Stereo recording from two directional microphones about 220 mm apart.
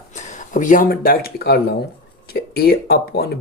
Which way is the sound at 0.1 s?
35° left (ahead or behind).